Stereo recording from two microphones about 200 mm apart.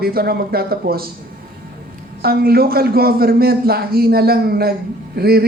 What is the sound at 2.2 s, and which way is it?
A man's voice, 50° right (ahead or behind).